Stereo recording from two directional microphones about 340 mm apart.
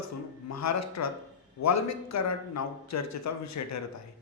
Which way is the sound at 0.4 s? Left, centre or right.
Left.